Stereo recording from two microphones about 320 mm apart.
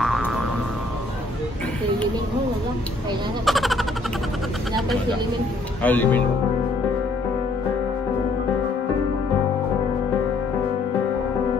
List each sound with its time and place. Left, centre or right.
0.0 s music: centre
3.4 s a sound: centre
5.8 s speech: centre